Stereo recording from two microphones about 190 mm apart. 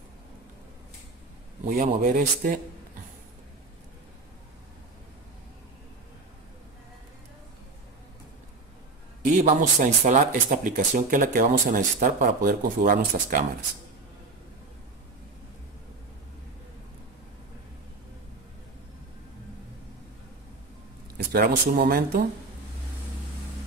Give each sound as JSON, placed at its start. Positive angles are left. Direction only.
{"t": 1.7, "sound": "speech", "side_deg": -45}
{"t": 9.2, "sound": "speech", "side_deg": -45}
{"t": 21.3, "sound": "speech", "side_deg": -50}